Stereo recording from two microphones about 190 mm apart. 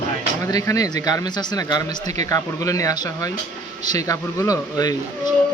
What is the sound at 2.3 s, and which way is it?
Speech, 15° left (ahead or behind).